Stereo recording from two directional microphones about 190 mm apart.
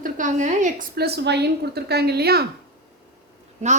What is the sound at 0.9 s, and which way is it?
A woman's voice, 60° right (ahead or behind).